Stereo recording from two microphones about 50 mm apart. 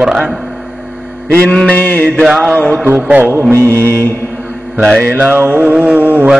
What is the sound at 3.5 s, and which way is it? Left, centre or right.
Mantra, right.